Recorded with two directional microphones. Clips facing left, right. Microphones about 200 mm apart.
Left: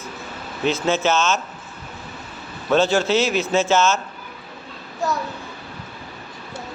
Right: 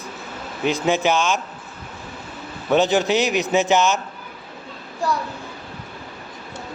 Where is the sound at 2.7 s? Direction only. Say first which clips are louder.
Even; 15° right (ahead or behind).